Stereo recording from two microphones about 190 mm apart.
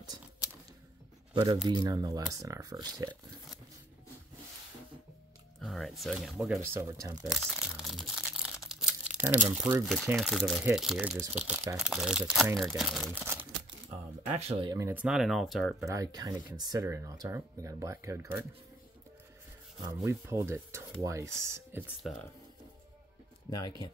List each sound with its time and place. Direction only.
1.3 s speech: 25° right (ahead or behind)
5.6 s speech: centre (ahead or behind)
6.7 s speech: 15° right (ahead or behind)
7.2 s crumpling: centre (ahead or behind)
10.1 s speech: centre (ahead or behind)
13.8 s speech: 35° right (ahead or behind)
14.7 s speech: 15° right (ahead or behind); by 15.7 s centre (ahead or behind)
15.8 s speech: 15° right (ahead or behind)
19.9 s speech: 15° right (ahead or behind)